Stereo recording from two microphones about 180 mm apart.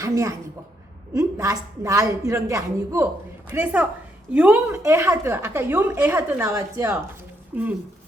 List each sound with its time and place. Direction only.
0.0 s a woman's voice: 15° right (ahead or behind)